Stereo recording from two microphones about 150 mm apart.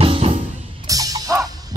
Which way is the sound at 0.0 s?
40° right (ahead or behind).